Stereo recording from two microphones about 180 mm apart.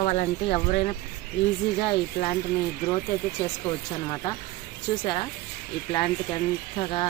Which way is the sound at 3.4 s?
20° left (ahead or behind).